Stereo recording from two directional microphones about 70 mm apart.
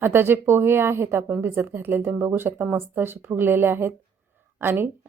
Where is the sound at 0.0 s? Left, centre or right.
Right.